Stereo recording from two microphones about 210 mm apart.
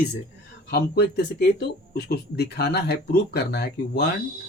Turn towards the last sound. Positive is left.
turn(degrees=50)  # may be behind; listen again after turning